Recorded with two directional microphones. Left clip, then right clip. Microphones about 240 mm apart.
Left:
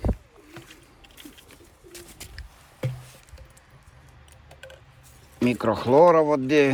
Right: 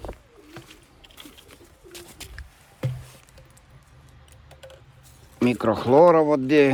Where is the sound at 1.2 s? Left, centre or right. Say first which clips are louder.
Right 1 dB; centre.